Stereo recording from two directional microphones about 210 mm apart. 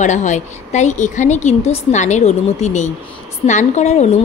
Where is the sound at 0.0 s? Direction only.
35° left (ahead or behind).